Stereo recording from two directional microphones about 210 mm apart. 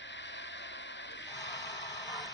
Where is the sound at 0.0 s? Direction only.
55° left (ahead or behind).